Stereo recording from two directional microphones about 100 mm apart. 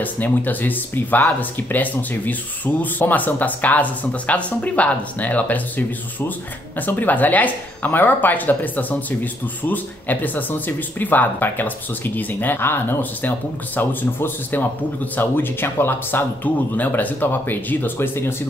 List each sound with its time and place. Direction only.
0.0 s speech: 15° left (ahead or behind)